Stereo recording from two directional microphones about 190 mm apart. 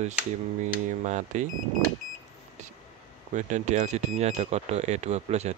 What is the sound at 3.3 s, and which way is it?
Speech, 40° right (ahead or behind).